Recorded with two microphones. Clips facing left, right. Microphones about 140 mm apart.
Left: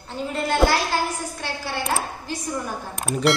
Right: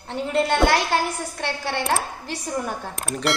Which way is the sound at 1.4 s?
70° right (ahead or behind).